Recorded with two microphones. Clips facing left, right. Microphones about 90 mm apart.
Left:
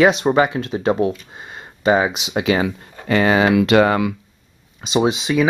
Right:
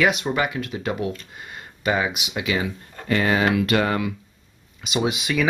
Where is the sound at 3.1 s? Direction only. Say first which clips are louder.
Left 5 dB; 90° left.